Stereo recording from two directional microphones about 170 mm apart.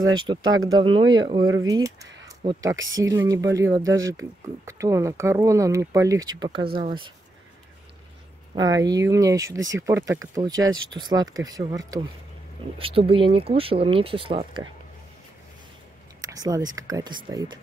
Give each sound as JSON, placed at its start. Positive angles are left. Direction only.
{"t": 0.0, "sound": "speech", "side_deg": -25}
{"t": 8.5, "sound": "speech", "side_deg": -20}
{"t": 12.7, "sound": "speech", "side_deg": -35}
{"t": 16.2, "sound": "speech", "side_deg": -20}